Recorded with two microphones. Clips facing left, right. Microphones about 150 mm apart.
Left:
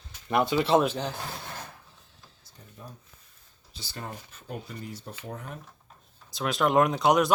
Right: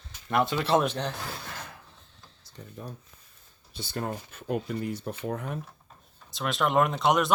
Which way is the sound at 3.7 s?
55° right (ahead or behind).